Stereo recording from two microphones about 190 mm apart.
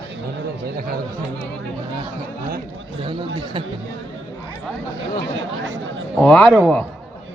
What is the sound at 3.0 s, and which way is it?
Speech, 25° right (ahead or behind).